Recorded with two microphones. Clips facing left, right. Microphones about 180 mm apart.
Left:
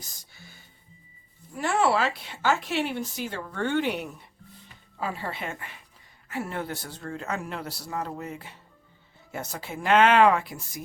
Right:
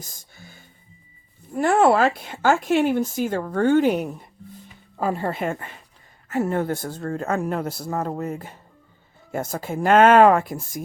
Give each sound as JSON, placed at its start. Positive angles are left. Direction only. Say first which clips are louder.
{"t": 0.0, "sound": "music", "louder": "right 5 dB", "side_deg": -50}
{"t": 1.5, "sound": "speech", "louder": "right 7 dB", "side_deg": -50}